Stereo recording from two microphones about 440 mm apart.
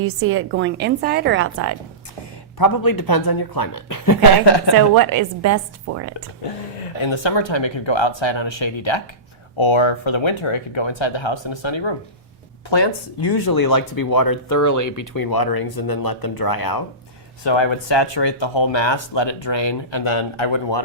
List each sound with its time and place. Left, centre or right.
0.0 s a woman's voice: right
2.6 s speech: left
4.4 s speech: left
4.9 s a woman's voice: right
7.0 s speech: left
12.7 s speech: left
17.4 s speech: left